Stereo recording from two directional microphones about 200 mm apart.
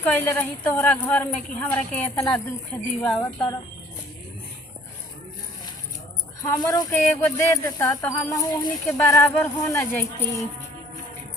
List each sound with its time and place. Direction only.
0.0 s speech: 10° left (ahead or behind)
6.4 s speech: 20° left (ahead or behind)